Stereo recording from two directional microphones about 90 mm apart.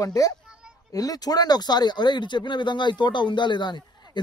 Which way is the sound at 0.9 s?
45° left (ahead or behind).